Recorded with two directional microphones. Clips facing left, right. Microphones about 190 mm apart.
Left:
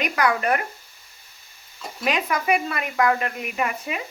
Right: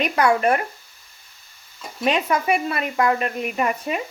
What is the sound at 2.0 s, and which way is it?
Speech, 30° right (ahead or behind).